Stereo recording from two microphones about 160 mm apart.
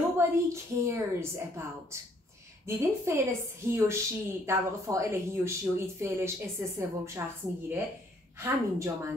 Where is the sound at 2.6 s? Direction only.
20° right (ahead or behind).